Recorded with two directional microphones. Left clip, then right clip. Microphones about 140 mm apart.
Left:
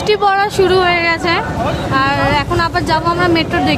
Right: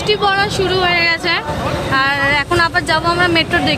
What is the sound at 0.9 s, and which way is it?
Speech, 20° left (ahead or behind).